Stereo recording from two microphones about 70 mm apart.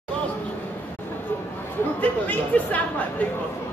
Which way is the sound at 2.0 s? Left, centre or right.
Left.